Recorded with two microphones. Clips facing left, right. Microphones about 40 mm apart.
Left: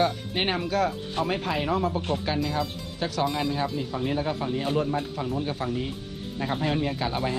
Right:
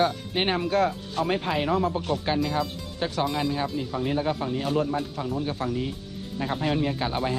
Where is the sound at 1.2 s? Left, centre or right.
Centre.